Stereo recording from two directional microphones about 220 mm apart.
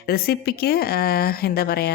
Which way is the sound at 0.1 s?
45° left (ahead or behind).